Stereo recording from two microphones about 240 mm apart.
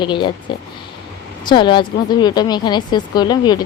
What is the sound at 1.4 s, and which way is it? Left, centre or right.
A woman's voice, centre.